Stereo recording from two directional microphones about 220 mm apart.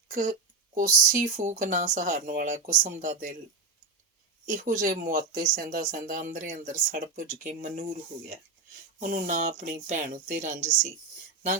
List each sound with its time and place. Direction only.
0.1 s speech: 45° right (ahead or behind)
4.4 s speech: 35° right (ahead or behind)
9.0 s speech: 40° right (ahead or behind)